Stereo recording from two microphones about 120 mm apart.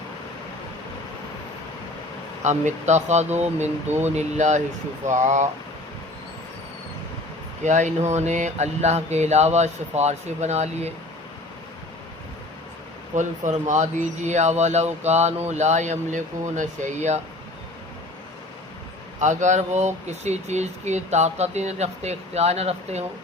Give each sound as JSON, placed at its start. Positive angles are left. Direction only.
{"t": 2.4, "sound": "speech", "side_deg": -80}
{"t": 3.8, "sound": "speech", "side_deg": -20}
{"t": 4.1, "sound": "speech", "side_deg": -75}
{"t": 7.6, "sound": "speech", "side_deg": -90}
{"t": 13.1, "sound": "speech", "side_deg": -90}
{"t": 19.2, "sound": "speech", "side_deg": -80}